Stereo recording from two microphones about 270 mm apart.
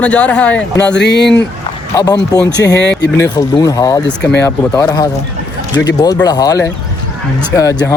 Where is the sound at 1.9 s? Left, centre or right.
Centre.